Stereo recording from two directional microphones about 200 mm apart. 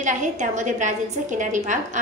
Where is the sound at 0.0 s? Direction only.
40° right (ahead or behind).